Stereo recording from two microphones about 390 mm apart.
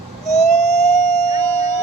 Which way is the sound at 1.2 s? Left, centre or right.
Centre.